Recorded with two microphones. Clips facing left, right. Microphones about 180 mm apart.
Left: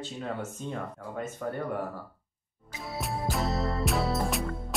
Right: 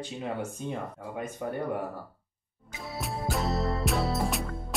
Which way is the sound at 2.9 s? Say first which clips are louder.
Even; centre (ahead or behind).